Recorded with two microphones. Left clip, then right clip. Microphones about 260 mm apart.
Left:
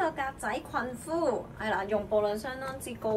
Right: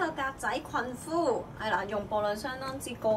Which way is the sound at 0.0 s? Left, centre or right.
Centre.